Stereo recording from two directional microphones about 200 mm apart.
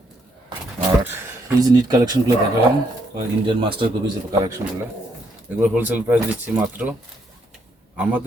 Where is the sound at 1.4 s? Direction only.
20° right (ahead or behind).